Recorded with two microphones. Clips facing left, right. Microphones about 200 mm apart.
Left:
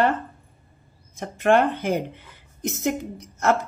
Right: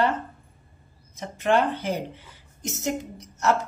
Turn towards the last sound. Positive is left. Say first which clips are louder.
# left 2 dB
turn(degrees=55)  # may be behind; listen again after turning